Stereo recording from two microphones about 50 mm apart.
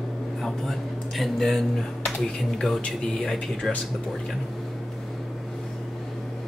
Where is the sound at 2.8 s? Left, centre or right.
Centre.